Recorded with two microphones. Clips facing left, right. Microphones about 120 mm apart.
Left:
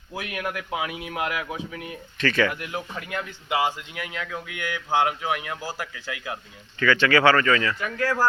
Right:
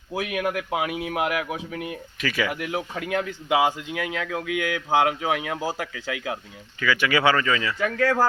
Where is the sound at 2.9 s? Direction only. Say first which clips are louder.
Right 5 dB; 90° right.